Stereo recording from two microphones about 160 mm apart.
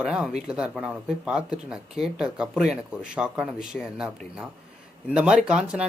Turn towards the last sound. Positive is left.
turn(degrees=-5)  # may be behind; listen again after turning